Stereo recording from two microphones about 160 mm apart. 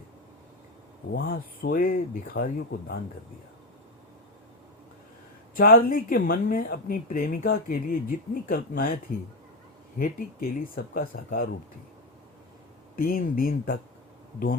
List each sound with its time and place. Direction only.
1.1 s speech: 65° left (ahead or behind)
5.5 s speech: 65° left (ahead or behind)
10.0 s speech: 65° left (ahead or behind)
13.0 s speech: 65° left (ahead or behind)